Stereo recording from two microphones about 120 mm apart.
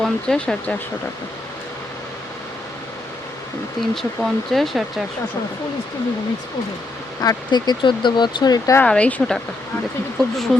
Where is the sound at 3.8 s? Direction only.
Centre (ahead or behind).